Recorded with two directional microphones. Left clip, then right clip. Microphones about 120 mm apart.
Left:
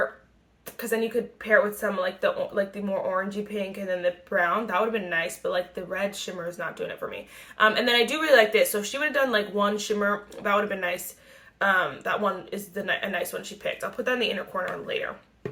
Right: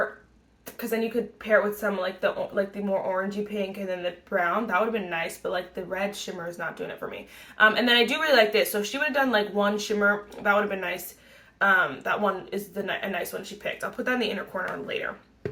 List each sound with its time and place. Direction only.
0.8 s speech: 30° left (ahead or behind)